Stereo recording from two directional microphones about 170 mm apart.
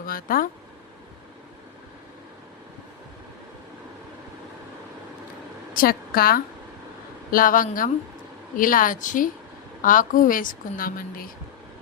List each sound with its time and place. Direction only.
0.0 s speech: 55° left (ahead or behind)
5.7 s a woman's voice: 60° left (ahead or behind)